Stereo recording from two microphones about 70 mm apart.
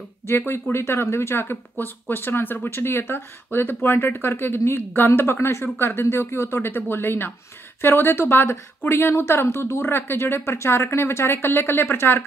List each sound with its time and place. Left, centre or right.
0.5 s a woman's voice: left